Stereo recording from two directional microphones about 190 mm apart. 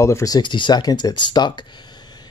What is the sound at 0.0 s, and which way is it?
Speech, 15° left (ahead or behind).